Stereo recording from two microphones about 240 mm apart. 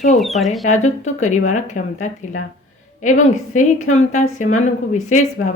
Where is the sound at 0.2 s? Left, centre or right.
Centre.